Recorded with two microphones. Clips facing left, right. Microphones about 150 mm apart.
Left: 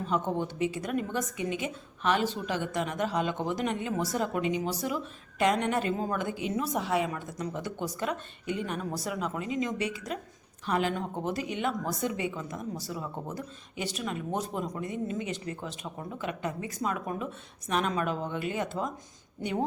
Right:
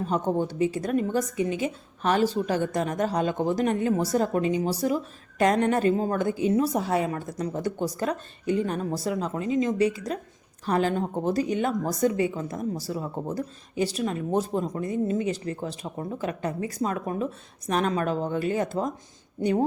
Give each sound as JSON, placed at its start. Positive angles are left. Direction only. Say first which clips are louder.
{"t": 0.0, "sound": "speech", "louder": "right 4 dB", "side_deg": -40}